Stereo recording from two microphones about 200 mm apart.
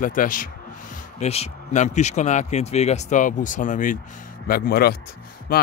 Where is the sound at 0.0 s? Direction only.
40° left (ahead or behind).